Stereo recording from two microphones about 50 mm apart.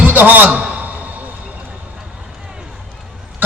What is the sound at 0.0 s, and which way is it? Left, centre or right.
Speech, right.